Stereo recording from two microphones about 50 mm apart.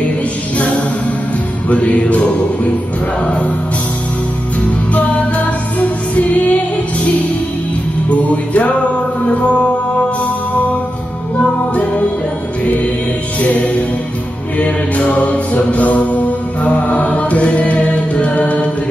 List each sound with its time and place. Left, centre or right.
0.6 s music: left
4.9 s music: left
8.1 s music: left
13.4 s music: left
14.6 s mantra: left